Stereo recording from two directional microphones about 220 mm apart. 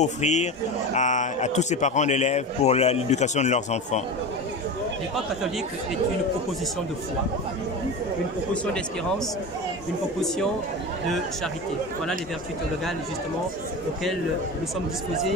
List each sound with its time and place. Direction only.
0.0 s a man's voice: 30° left (ahead or behind)